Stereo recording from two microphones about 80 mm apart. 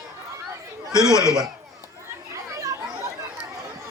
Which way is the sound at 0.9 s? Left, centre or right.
Left.